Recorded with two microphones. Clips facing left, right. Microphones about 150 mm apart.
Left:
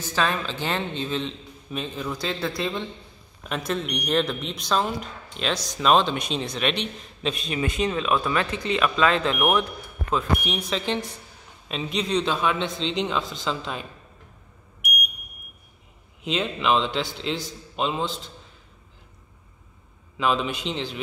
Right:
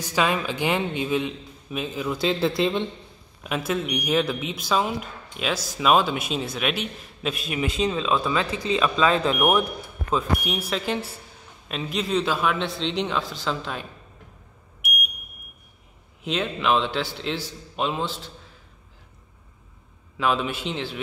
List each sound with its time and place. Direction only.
0.0 s a man's voice: 15° right (ahead or behind)
2.1 s speech: 25° right (ahead or behind)
3.4 s a man's voice: 5° right (ahead or behind)
16.3 s speech: centre (ahead or behind)
20.2 s speech: centre (ahead or behind)